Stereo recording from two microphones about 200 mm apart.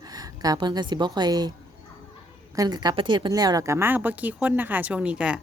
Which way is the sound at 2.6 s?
20° right (ahead or behind).